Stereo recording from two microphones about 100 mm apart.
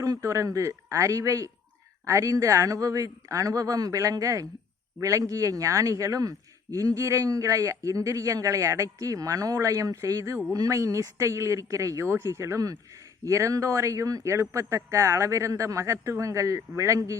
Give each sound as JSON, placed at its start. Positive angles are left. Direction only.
{"t": 0.0, "sound": "a man's voice", "side_deg": -35}